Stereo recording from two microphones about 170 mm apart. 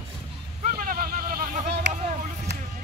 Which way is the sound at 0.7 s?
55° right (ahead or behind).